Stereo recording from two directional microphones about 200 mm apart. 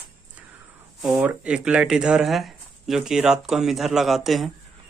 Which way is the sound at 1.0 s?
5° right (ahead or behind).